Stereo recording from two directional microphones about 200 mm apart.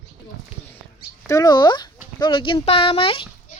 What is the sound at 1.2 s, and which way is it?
Speech, 15° left (ahead or behind).